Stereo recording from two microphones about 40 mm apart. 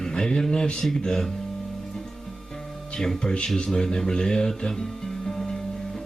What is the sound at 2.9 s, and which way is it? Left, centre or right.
Music, centre.